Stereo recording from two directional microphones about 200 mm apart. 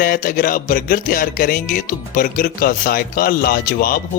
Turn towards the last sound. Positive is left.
turn(degrees=45)  # may be behind; listen again after turning